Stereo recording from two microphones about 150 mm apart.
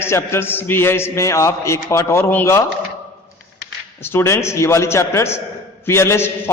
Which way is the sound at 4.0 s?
15° left (ahead or behind).